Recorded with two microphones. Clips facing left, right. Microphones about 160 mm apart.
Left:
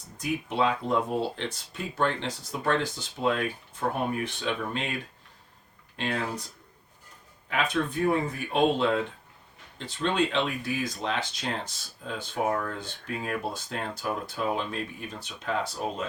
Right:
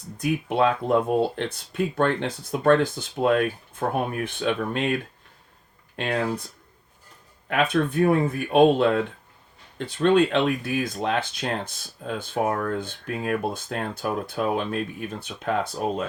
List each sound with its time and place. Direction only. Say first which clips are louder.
0.2 s speech: right 5 dB; 55° right (ahead or behind)
6.0 s speech: right 5 dB; 55° right (ahead or behind)
7.4 s speech: right 5 dB; 55° right (ahead or behind)